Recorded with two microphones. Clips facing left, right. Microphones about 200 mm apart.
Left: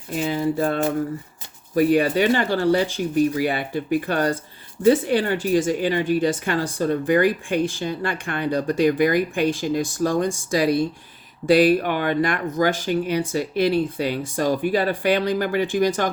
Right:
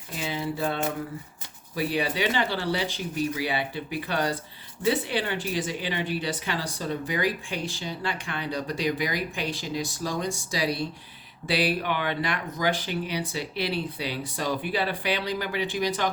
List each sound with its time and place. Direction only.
0.2 s speech: 45° left (ahead or behind)